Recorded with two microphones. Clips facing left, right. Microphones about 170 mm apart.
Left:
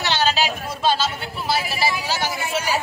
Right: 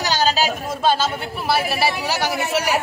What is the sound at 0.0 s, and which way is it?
Speech, 40° right (ahead or behind).